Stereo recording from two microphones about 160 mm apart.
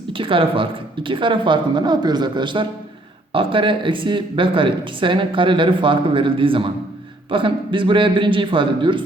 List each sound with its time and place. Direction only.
0.1 s speech: 35° right (ahead or behind)